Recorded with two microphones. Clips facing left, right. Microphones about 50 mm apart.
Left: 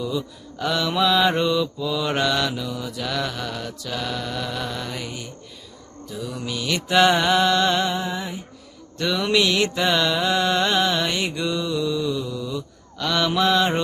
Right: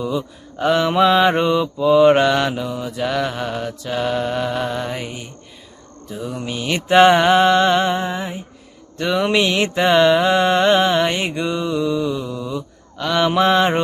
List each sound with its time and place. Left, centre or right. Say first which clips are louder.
0.0 s mantra: right 4 dB; right